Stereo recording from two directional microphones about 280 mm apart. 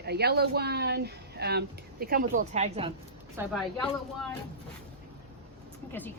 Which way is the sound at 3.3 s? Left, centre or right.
Centre.